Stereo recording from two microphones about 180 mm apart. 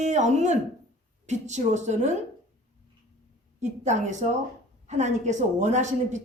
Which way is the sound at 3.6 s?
40° right (ahead or behind).